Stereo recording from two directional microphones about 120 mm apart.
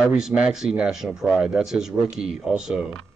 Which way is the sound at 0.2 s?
5° right (ahead or behind).